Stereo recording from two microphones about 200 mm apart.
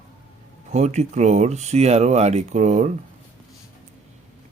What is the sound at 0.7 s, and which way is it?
Speech, 35° right (ahead or behind).